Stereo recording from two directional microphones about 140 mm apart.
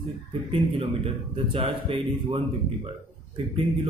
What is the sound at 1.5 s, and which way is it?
Speech, 45° right (ahead or behind).